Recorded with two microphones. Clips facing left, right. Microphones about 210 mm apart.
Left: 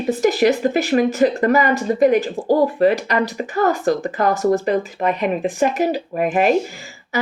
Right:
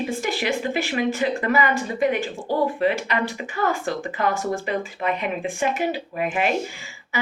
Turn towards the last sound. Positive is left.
turn(degrees=40)  # may be behind; listen again after turning